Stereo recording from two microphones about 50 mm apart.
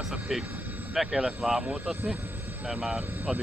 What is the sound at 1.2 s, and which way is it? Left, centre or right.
Speech, centre.